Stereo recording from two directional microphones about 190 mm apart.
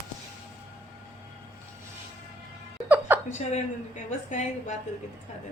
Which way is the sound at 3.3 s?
40° left (ahead or behind).